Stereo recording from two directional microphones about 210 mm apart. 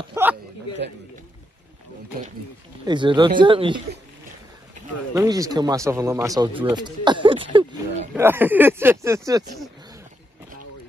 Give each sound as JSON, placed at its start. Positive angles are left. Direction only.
{"t": 0.1, "sound": "a sound", "side_deg": -10}
{"t": 2.8, "sound": "speech", "side_deg": -20}
{"t": 5.1, "sound": "speech", "side_deg": -15}
{"t": 8.1, "sound": "speech", "side_deg": -10}